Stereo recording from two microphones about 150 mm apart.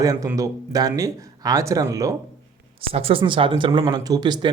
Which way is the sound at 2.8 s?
40° right (ahead or behind).